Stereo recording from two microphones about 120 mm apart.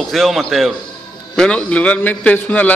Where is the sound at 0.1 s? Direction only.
Centre (ahead or behind).